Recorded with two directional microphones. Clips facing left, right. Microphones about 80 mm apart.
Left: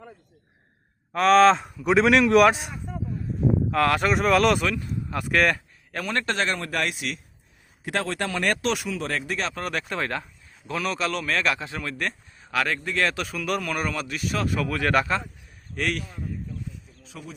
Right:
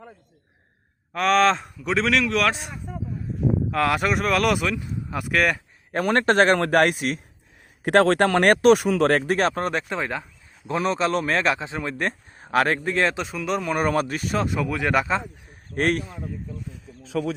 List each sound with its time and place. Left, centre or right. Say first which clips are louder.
1.1 s speech: left 3 dB; centre
2.0 s a man's voice: left 5 dB; left
2.6 s speech: even; centre
6.1 s speech: right 8 dB; right
7.9 s speech: right 10 dB; right
9.6 s speech: right 3 dB; right
10.7 s speech: right 5 dB; right
13.7 s speech: right 6 dB; right
14.4 s speech: right 1 dB; centre
15.7 s speech: right 5 dB; right